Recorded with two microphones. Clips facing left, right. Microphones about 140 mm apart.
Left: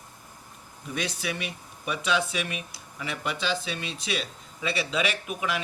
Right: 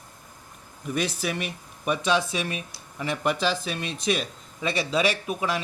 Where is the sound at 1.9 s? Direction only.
35° right (ahead or behind).